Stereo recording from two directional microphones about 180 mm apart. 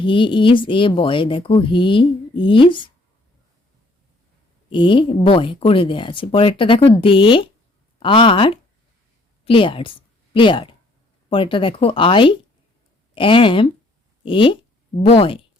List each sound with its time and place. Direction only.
0.0 s speech: 30° left (ahead or behind)
4.7 s speech: 25° left (ahead or behind)